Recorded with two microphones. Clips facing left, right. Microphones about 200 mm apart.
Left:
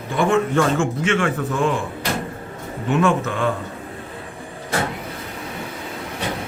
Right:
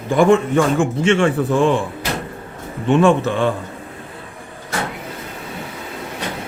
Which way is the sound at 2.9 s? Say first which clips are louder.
Right 5 dB; 30° right (ahead or behind).